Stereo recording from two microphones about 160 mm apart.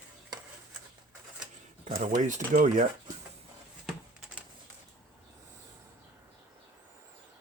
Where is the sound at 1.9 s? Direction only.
60° right (ahead or behind).